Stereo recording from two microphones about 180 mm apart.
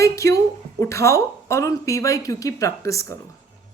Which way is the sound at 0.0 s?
15° left (ahead or behind).